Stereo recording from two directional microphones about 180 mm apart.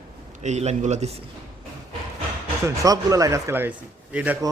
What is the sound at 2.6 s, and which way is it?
A man's voice, 20° right (ahead or behind).